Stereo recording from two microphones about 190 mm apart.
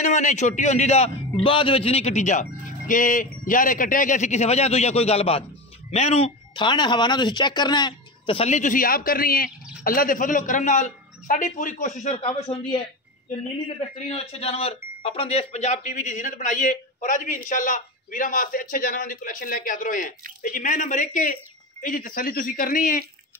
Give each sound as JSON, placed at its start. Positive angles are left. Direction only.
{"t": 0.0, "sound": "speech", "side_deg": 40}
{"t": 13.9, "sound": "speech", "side_deg": 35}